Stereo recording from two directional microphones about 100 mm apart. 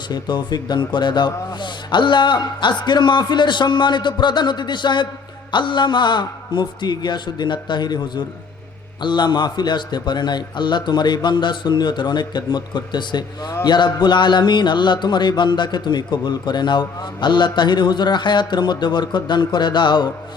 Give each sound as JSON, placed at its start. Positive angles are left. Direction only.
{"t": 0.1, "sound": "speech", "side_deg": 45}